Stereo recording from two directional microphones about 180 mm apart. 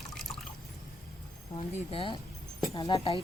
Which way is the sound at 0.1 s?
Centre (ahead or behind).